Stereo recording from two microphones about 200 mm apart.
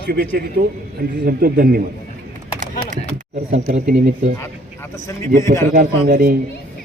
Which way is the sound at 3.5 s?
35° right (ahead or behind).